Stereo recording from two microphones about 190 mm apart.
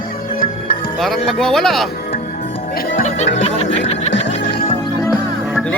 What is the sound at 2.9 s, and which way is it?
Music, 40° left (ahead or behind).